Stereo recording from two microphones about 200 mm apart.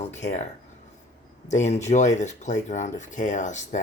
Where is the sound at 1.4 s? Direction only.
35° left (ahead or behind).